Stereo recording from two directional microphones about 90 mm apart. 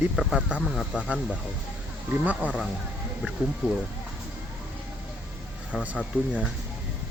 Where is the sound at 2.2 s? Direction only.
15° right (ahead or behind).